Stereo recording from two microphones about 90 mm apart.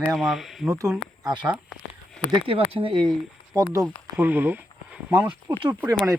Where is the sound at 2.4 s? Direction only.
90° right.